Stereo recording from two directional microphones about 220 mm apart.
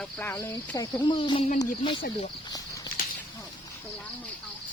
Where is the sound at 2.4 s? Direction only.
15° left (ahead or behind).